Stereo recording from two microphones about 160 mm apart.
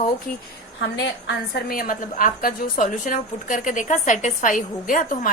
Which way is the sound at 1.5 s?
65° left (ahead or behind).